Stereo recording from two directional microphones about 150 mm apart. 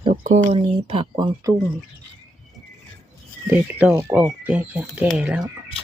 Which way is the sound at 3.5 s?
10° right (ahead or behind).